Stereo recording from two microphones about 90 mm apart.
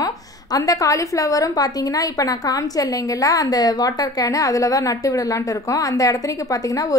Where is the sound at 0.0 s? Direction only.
40° left (ahead or behind).